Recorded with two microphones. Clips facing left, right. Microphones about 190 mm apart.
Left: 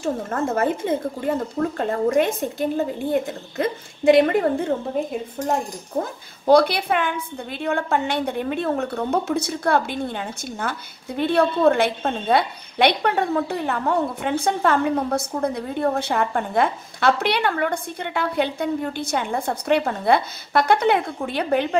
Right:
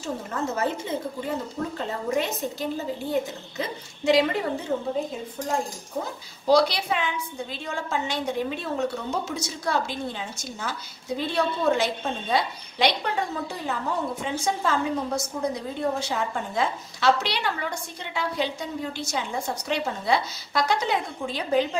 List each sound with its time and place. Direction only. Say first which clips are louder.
0.0 s a woman's voice: left 6 dB; 50° left (ahead or behind)
6.0 s a woman's voice: left 6 dB; 55° left (ahead or behind)